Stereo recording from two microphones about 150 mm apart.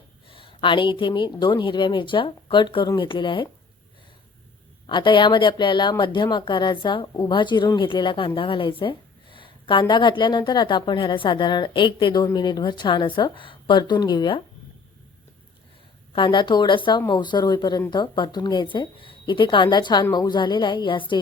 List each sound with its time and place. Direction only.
0.3 s a woman's voice: 35° left (ahead or behind)
4.9 s a woman's voice: 30° left (ahead or behind)
16.1 s a woman's voice: 35° left (ahead or behind)